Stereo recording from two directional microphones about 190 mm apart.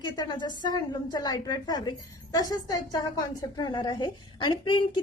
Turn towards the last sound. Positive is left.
turn(degrees=25)  # may be behind; listen again after turning